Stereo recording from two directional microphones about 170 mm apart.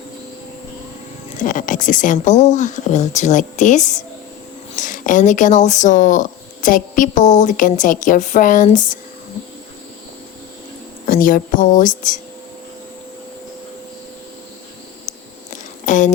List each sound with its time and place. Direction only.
1.4 s speech: 50° left (ahead or behind)
11.0 s speech: 55° left (ahead or behind)
15.1 s a sound: 45° left (ahead or behind)
15.9 s speech: 50° left (ahead or behind)